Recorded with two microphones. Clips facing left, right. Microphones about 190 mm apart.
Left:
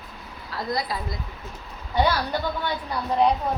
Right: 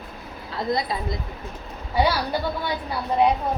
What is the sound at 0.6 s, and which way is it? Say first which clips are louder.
Speech: right 3 dB; 25° right (ahead or behind).